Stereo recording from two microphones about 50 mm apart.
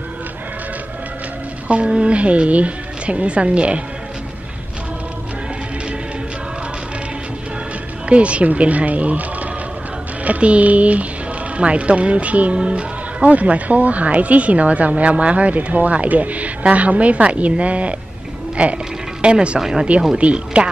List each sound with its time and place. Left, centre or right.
1.7 s speech: right
8.1 s speech: right
10.2 s speech: right
19.6 s speech: centre
20.2 s speech: right